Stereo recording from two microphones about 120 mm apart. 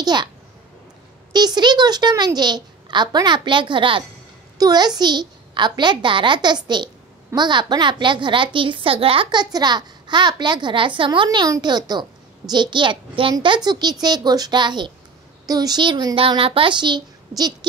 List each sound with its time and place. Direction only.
0.0 s a child's voice: 35° right (ahead or behind)
1.3 s a child's voice: 35° right (ahead or behind)
4.6 s a woman's voice: 35° right (ahead or behind)